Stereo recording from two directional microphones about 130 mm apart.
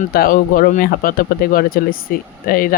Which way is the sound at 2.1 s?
90° left.